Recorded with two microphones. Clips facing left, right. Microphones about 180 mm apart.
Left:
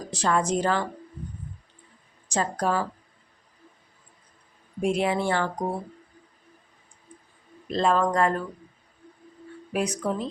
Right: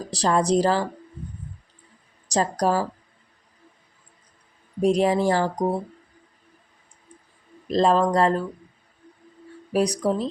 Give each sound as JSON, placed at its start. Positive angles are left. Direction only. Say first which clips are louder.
{"t": 0.1, "sound": "speech", "louder": "right 4 dB", "side_deg": -35}
{"t": 2.2, "sound": "a woman's voice", "louder": "right 4 dB", "side_deg": -35}
{"t": 4.8, "sound": "speech", "louder": "right 5 dB", "side_deg": -40}
{"t": 7.7, "sound": "speech", "louder": "right 4 dB", "side_deg": -35}
{"t": 9.7, "sound": "speech", "louder": "right 5 dB", "side_deg": -35}